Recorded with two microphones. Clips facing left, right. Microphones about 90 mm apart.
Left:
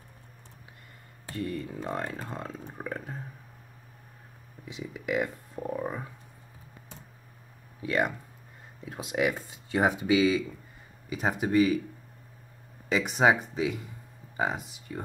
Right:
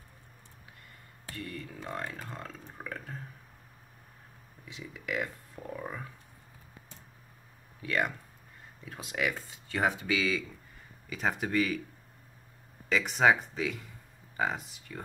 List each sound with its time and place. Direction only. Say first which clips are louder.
1.2 s speech: left 7 dB; 25° left (ahead or behind)
2.3 s speech: left 5 dB; 20° left (ahead or behind)
4.6 s speech: left 6 dB; 20° left (ahead or behind)
7.8 s speech: left 3 dB; 20° left (ahead or behind)
12.9 s speech: left 2 dB; 15° left (ahead or behind)